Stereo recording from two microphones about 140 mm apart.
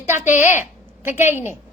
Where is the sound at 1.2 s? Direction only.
15° right (ahead or behind).